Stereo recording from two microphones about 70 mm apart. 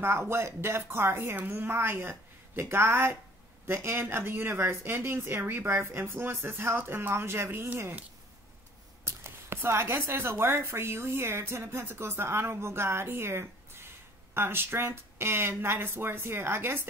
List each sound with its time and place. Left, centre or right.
0.0 s speech: right
9.0 s speech: right